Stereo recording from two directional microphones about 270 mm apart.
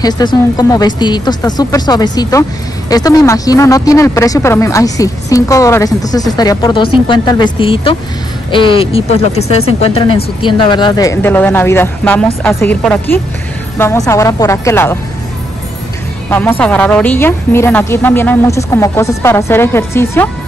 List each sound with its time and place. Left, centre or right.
0.0 s speech: centre
16.3 s speech: centre